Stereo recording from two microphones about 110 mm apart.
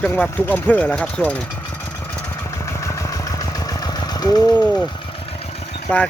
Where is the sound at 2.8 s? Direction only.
30° left (ahead or behind).